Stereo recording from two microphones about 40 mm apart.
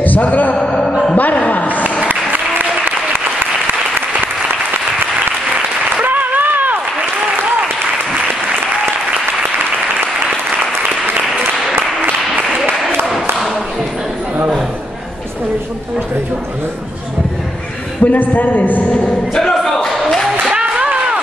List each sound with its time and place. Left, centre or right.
0.0 s a man's voice: left
0.6 s music: centre
1.1 s music: left
2.0 s applause: right
6.0 s applause: right
18.0 s a man's voice: left
19.3 s music: centre
19.9 s a sound: centre
20.5 s a sound: right